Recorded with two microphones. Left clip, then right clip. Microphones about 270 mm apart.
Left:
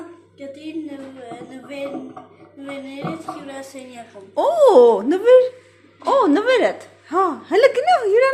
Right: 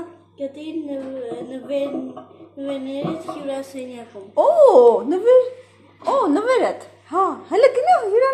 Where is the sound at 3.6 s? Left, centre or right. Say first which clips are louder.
Right 4 dB; left.